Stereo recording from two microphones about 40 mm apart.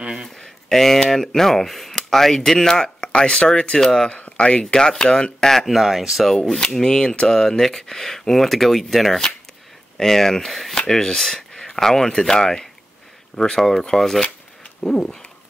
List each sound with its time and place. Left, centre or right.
0.7 s speech: centre
4.7 s speech: centre
5.7 s speech: centre
6.7 s speech: centre